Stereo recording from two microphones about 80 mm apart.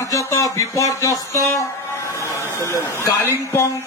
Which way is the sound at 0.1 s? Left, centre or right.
Left.